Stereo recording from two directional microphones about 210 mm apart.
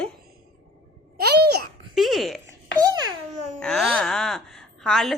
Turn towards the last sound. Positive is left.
turn(degrees=0)  # may be behind; listen again after turning